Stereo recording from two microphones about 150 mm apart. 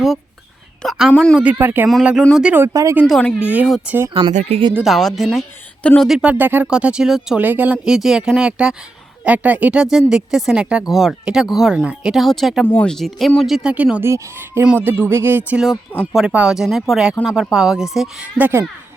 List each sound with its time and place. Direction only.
0.8 s speech: centre (ahead or behind)
1.4 s speech: 10° right (ahead or behind)
1.9 s speech: centre (ahead or behind); by 3.0 s 20° right (ahead or behind)
3.1 s speech: 5° left (ahead or behind)
3.4 s speech: 10° right (ahead or behind)
4.3 s speech: 50° right (ahead or behind)
4.8 s speech: centre (ahead or behind)